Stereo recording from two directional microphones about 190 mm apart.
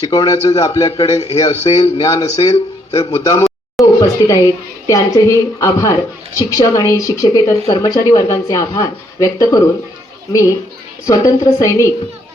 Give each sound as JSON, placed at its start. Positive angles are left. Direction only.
{"t": 0.0, "sound": "a man's voice", "side_deg": 20}
{"t": 11.0, "sound": "a woman's voice", "side_deg": 20}